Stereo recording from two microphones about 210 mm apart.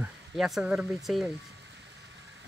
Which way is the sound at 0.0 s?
Centre (ahead or behind).